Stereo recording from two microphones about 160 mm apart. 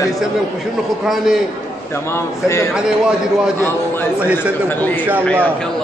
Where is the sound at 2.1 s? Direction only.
20° left (ahead or behind).